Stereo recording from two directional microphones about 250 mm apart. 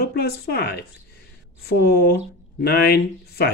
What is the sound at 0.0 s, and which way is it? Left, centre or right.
Speech, left.